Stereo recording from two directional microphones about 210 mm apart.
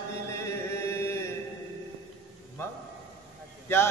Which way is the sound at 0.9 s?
10° left (ahead or behind).